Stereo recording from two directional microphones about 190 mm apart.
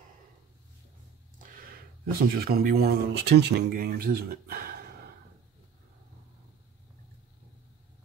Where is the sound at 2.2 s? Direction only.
50° right (ahead or behind).